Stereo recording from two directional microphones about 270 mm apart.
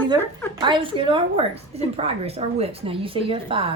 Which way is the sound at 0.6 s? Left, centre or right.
Centre.